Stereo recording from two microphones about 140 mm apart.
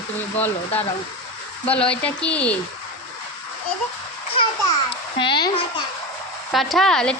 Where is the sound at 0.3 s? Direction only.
10° left (ahead or behind).